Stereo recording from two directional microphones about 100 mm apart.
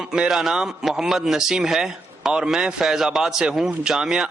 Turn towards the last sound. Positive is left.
turn(degrees=-5)  # may be behind; listen again after turning